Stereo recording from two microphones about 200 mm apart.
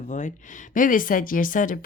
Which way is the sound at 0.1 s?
40° left (ahead or behind).